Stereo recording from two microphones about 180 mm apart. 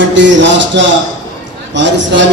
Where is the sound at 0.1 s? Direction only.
90° right.